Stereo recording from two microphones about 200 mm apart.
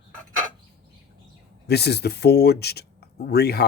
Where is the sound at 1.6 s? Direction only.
55° left (ahead or behind).